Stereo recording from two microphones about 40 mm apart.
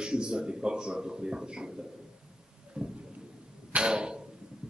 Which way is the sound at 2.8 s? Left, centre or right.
Centre.